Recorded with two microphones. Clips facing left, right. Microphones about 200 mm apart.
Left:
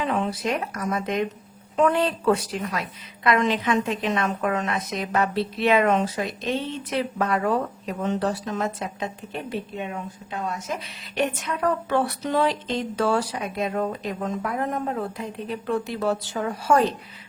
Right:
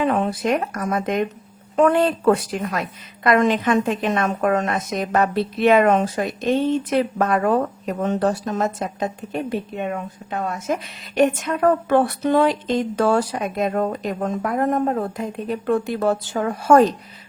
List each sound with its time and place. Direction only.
0.0 s a woman's voice: 50° right (ahead or behind)